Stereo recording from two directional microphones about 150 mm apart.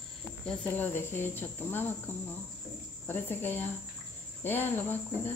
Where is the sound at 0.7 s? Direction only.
15° left (ahead or behind).